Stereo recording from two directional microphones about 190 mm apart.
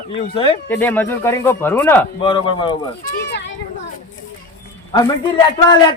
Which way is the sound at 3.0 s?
60° left (ahead or behind).